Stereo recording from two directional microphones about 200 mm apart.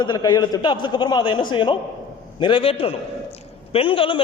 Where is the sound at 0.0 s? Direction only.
20° left (ahead or behind).